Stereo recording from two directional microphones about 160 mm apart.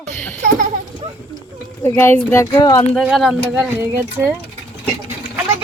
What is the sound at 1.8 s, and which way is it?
Speech, 15° left (ahead or behind).